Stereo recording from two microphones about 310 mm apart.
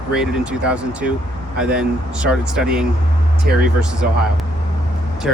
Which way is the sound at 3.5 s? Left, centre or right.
Right.